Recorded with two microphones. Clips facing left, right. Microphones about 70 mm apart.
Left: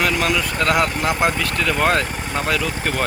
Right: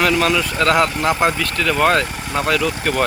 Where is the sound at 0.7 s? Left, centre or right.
Right.